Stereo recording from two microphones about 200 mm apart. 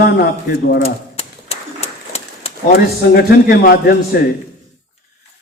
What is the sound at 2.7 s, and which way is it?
A man's voice, 50° left (ahead or behind).